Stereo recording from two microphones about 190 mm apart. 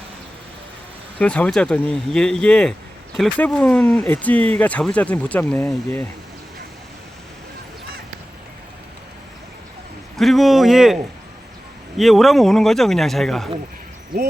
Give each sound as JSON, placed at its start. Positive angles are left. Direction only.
{"t": 1.2, "sound": "a man's voice", "side_deg": 5}
{"t": 10.2, "sound": "a man's voice", "side_deg": 0}